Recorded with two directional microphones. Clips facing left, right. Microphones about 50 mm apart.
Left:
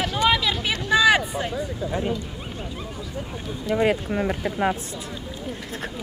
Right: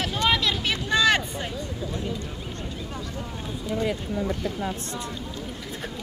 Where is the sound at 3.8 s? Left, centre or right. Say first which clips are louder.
Left 6 dB; left.